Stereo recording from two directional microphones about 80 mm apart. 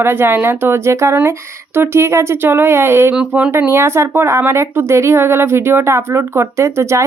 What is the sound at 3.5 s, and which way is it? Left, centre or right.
Speech, right.